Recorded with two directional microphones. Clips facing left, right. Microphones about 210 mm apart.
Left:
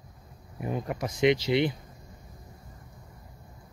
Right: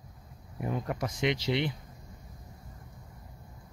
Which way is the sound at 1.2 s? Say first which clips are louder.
Left 7 dB; 10° left (ahead or behind).